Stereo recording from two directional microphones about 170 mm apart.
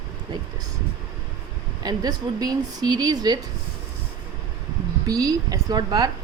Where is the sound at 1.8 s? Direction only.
25° right (ahead or behind).